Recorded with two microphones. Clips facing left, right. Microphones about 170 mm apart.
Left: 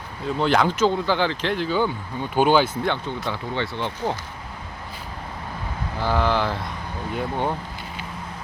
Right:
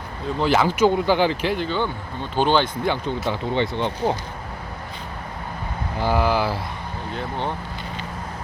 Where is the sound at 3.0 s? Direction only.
15° right (ahead or behind).